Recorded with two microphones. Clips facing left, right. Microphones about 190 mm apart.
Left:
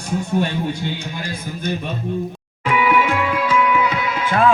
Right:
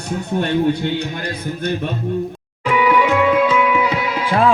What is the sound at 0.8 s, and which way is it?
Speech, 60° right (ahead or behind).